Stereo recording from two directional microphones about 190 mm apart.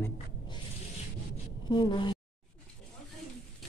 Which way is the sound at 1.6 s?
25° left (ahead or behind).